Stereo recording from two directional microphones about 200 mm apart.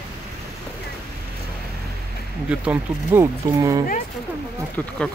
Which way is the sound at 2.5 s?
10° right (ahead or behind).